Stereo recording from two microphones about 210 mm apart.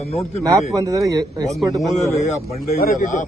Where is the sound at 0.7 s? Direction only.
15° right (ahead or behind).